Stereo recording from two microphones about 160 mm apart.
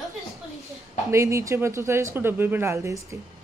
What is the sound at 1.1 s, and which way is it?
Speech, 20° right (ahead or behind).